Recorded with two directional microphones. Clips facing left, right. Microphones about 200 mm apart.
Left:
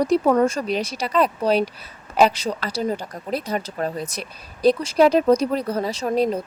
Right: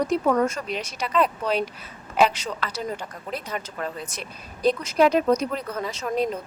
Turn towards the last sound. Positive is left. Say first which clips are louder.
# left 5 dB
turn(degrees=35)  # may be behind; listen again after turning